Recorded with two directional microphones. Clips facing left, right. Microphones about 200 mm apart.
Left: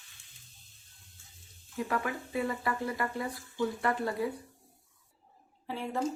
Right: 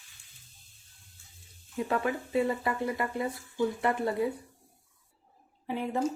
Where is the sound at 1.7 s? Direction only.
25° right (ahead or behind).